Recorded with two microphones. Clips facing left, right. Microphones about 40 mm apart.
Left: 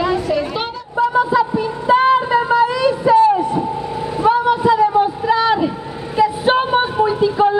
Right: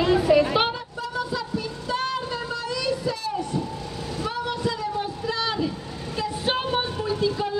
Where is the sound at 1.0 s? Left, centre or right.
Left.